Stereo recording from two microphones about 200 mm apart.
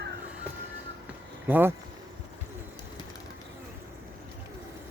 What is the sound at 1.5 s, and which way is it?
Speech, 10° right (ahead or behind).